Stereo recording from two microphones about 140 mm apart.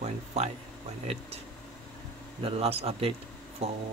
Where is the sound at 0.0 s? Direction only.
50° right (ahead or behind).